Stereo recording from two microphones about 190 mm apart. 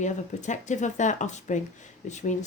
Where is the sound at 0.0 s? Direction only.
40° left (ahead or behind).